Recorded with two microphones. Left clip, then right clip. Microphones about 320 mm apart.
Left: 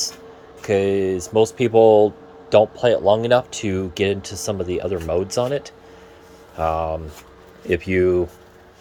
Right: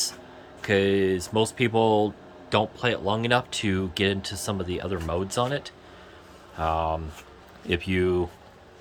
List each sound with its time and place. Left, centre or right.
0.7 s speech: centre
3.0 s speech: centre
3.3 s speech: centre